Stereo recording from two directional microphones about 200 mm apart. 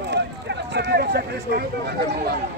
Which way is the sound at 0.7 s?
55° right (ahead or behind).